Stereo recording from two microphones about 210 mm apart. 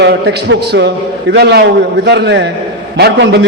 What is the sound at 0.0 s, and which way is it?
A man's voice, 55° right (ahead or behind).